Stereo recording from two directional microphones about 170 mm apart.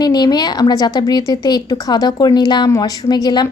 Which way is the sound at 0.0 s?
25° left (ahead or behind).